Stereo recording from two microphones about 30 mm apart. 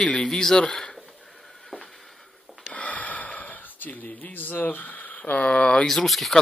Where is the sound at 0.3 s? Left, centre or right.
Centre.